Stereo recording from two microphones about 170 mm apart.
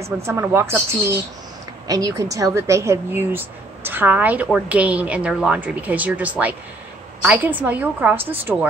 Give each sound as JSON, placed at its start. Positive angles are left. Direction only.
{"t": 0.2, "sound": "speech", "side_deg": -15}